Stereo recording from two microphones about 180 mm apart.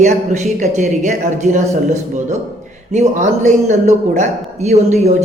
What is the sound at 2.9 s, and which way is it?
A man's voice, 40° right (ahead or behind).